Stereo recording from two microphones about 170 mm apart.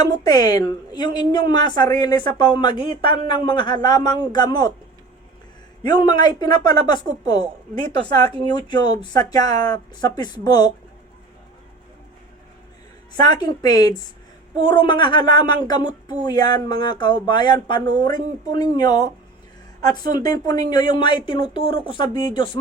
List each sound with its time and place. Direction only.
0.0 s a woman's voice: 25° left (ahead or behind)
5.9 s a woman's voice: 25° left (ahead or behind)
13.1 s a woman's voice: 25° left (ahead or behind)